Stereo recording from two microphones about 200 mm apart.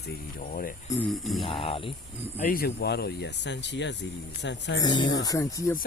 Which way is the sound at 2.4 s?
45° left (ahead or behind).